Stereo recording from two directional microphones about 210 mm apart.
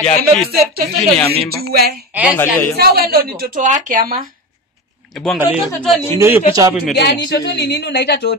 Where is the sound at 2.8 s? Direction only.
45° right (ahead or behind).